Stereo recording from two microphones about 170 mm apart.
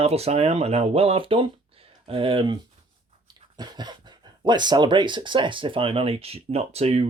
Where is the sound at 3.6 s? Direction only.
25° right (ahead or behind).